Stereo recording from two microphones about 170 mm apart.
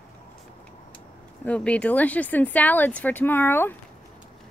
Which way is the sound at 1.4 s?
5° left (ahead or behind).